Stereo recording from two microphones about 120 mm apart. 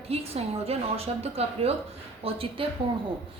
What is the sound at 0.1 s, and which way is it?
A woman's voice, 55° right (ahead or behind).